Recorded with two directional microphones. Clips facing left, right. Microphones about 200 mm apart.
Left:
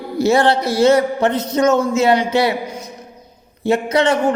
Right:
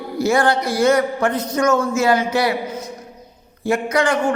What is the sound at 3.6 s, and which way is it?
Speech, 25° left (ahead or behind).